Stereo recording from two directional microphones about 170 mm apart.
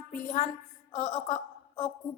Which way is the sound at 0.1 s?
45° left (ahead or behind).